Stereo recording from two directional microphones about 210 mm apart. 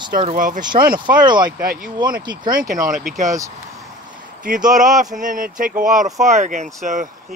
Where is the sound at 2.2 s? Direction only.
20° right (ahead or behind).